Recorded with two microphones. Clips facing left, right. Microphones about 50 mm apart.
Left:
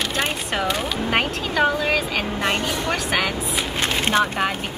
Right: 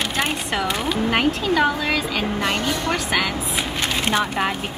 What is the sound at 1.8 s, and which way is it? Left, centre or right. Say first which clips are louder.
Speech: even; left.